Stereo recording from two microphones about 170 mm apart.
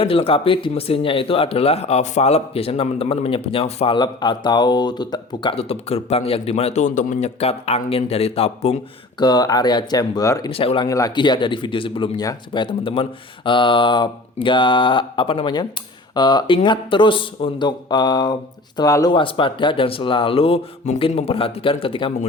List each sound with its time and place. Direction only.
0.0 s speech: 35° left (ahead or behind)
9.2 s speech: 25° left (ahead or behind)
10.5 s speech: 35° left (ahead or behind)
10.8 s speech: 20° left (ahead or behind)